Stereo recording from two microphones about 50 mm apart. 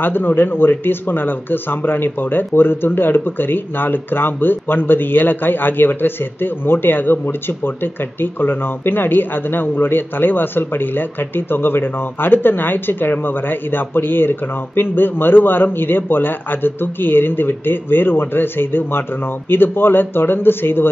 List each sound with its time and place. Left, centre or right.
0.0 s speech: left